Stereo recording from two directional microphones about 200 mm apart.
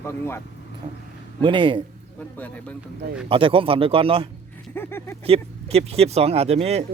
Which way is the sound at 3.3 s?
25° right (ahead or behind).